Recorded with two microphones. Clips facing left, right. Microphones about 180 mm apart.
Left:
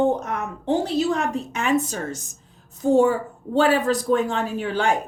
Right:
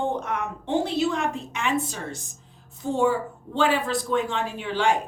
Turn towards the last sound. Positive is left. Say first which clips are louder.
# left 2 dB
turn(degrees=45)  # may be behind; listen again after turning